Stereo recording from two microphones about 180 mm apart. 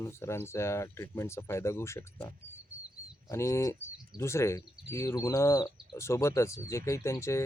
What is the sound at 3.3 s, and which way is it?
Speech, 15° left (ahead or behind).